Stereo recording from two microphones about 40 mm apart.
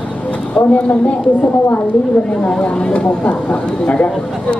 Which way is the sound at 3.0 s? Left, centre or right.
Left.